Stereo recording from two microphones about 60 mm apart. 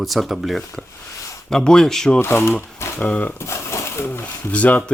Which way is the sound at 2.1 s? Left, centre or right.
Left.